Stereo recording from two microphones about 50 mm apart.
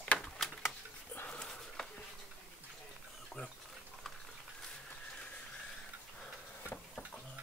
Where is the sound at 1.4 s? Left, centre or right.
Centre.